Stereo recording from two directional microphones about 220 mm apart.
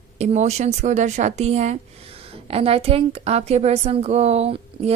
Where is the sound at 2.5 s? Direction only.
25° right (ahead or behind).